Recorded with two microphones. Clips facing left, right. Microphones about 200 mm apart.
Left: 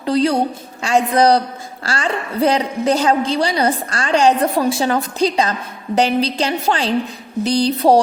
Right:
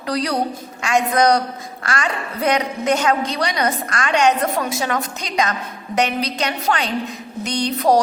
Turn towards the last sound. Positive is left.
turn(degrees=30)  # may be behind; listen again after turning